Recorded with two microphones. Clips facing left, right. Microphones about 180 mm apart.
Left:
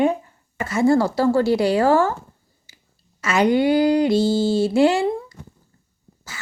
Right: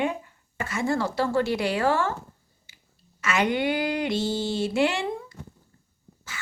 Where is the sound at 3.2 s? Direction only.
35° left (ahead or behind).